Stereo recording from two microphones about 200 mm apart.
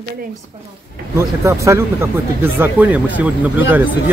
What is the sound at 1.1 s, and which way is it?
Speech, 15° right (ahead or behind).